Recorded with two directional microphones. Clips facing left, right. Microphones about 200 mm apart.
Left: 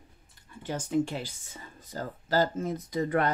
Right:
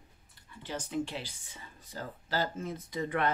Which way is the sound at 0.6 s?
45° left (ahead or behind).